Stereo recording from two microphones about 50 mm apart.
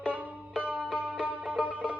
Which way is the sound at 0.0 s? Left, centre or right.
Right.